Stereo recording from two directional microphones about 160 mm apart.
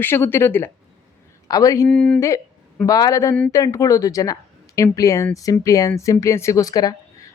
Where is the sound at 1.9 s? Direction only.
5° left (ahead or behind).